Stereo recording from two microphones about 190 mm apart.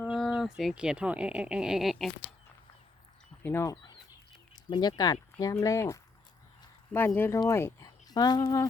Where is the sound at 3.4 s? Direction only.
10° left (ahead or behind).